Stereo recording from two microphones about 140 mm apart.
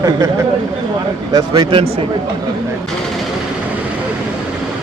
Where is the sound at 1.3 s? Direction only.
30° right (ahead or behind).